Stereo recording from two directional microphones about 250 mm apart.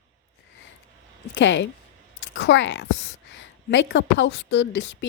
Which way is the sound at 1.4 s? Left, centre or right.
Left.